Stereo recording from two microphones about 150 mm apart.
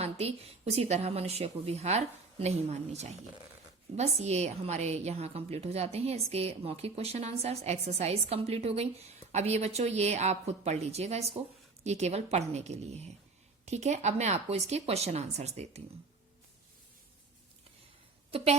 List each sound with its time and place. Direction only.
0.0 s a woman's voice: 45° right (ahead or behind)
18.3 s a woman's voice: 40° right (ahead or behind)